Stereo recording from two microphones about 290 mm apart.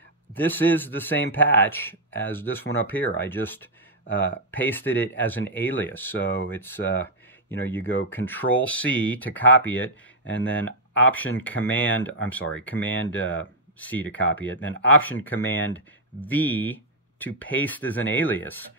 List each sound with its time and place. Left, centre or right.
0.3 s a man's voice: centre